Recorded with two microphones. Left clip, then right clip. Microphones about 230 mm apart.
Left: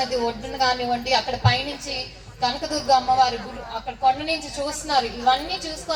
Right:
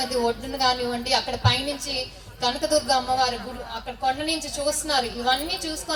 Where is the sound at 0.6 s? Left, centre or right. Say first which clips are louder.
Left 2 dB; right.